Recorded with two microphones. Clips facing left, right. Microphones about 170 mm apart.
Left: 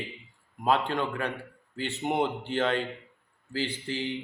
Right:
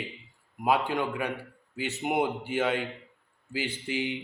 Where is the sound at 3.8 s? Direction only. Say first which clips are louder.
Right 1 dB; 15° right (ahead or behind).